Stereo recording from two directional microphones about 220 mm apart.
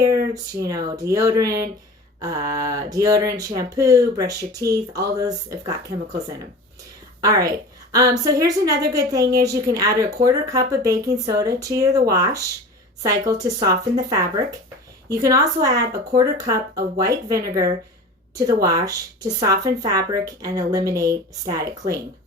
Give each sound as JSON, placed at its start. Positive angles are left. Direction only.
{"t": 0.7, "sound": "speech", "side_deg": -15}
{"t": 7.2, "sound": "speech", "side_deg": -15}